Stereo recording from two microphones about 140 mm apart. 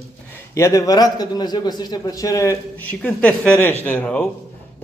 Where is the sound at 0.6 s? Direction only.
20° left (ahead or behind).